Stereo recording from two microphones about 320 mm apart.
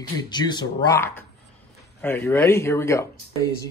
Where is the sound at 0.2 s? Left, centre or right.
Centre.